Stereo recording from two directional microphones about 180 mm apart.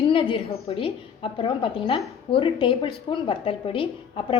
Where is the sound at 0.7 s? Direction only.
30° left (ahead or behind).